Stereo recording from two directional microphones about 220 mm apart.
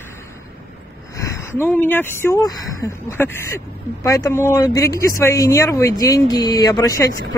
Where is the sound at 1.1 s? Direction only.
15° left (ahead or behind).